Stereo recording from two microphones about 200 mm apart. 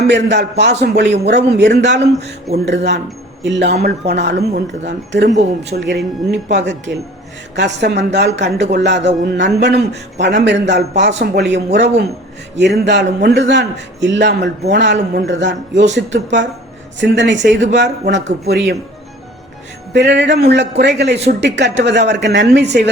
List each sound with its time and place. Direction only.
0.1 s a man's voice: 55° right (ahead or behind)
2.0 s speech: 35° right (ahead or behind)
2.6 s a man's voice: 60° right (ahead or behind)
19.9 s a man's voice: 60° right (ahead or behind)